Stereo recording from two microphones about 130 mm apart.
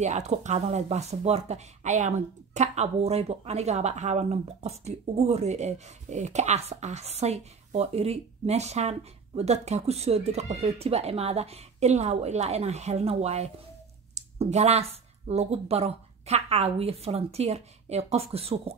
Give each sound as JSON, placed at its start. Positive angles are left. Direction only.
{"t": 0.0, "sound": "speech", "side_deg": -65}